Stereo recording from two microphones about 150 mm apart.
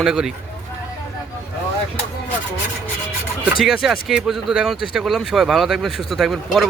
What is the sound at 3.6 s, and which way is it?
Speech, centre (ahead or behind).